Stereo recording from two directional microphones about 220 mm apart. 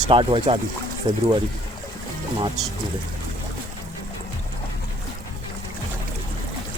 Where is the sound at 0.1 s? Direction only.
25° right (ahead or behind).